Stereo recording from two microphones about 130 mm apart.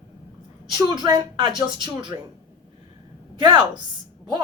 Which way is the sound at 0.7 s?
35° right (ahead or behind).